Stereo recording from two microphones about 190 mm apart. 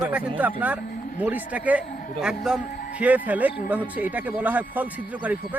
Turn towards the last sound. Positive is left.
turn(degrees=-10)  # may be behind; listen again after turning